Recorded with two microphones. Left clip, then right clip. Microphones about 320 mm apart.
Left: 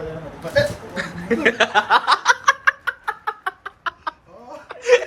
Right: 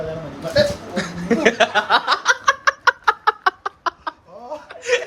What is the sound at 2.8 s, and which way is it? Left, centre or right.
Chicken, right.